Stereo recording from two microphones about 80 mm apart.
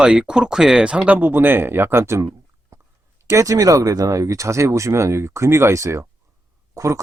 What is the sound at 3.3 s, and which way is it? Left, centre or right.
Speech, right.